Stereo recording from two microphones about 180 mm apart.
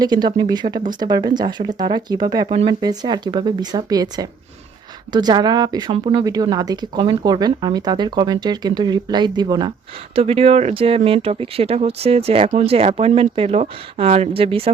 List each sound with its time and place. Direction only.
0.0 s speech: 25° right (ahead or behind)
10.2 s speech: 35° right (ahead or behind)